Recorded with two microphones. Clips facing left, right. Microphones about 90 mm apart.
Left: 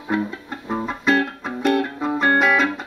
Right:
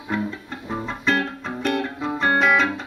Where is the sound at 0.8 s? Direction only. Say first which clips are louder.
Left 3 dB; 5° left (ahead or behind).